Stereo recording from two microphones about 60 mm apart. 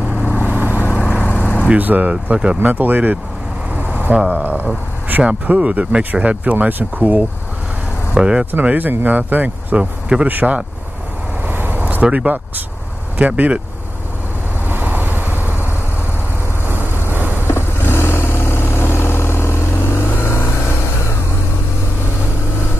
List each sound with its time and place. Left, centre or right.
0.4 s vehicle: right
0.8 s vehicle: left
1.7 s speech: right
3.9 s vehicle: right
4.3 s speech: right
8.1 s speech: centre
8.5 s speech: right
11.4 s vehicle: right
13.2 s speech: right
14.7 s vehicle: right
17.5 s vehicle: left